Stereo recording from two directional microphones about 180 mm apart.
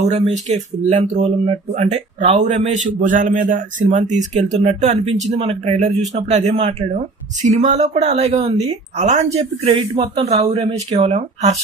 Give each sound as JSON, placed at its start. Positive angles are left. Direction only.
{"t": 0.0, "sound": "speech", "side_deg": -40}